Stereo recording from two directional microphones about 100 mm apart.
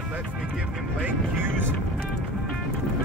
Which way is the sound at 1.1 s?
20° right (ahead or behind).